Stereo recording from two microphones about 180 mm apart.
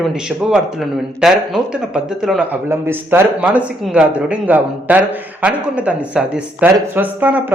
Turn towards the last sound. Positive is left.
turn(degrees=-10)  # may be behind; listen again after turning